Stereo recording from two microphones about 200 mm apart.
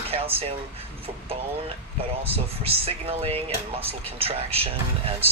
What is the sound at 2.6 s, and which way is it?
Speech, 30° right (ahead or behind).